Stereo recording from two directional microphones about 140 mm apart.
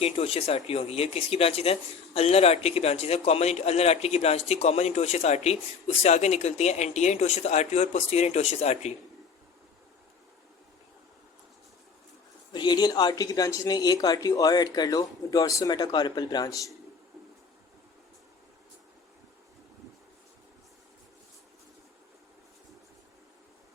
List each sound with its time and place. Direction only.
0.0 s speech: 45° left (ahead or behind)
12.5 s speech: 30° left (ahead or behind)